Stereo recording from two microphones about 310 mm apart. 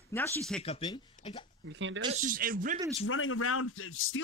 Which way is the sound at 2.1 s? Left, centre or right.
Right.